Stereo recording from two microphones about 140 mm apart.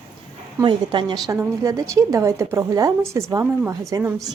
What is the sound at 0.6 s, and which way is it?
A woman's voice, 35° right (ahead or behind).